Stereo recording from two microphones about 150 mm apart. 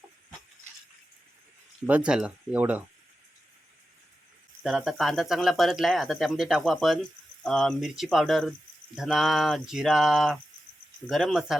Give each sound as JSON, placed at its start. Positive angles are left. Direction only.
{"t": 1.9, "sound": "speech", "side_deg": -5}
{"t": 4.6, "sound": "speech", "side_deg": 0}